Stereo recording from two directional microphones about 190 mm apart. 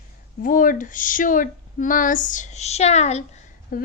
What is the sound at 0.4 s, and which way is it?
A woman's voice, 45° left (ahead or behind).